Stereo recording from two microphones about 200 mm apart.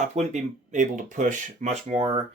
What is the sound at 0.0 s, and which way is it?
Speech, 35° right (ahead or behind).